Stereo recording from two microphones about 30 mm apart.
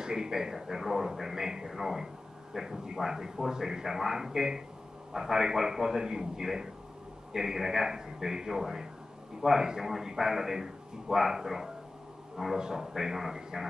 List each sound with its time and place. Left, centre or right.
0.0 s a man's voice: right
12.5 s a man's voice: right
12.9 s a man's voice: centre